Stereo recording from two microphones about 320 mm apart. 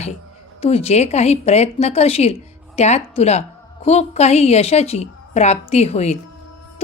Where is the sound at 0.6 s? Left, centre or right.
Centre.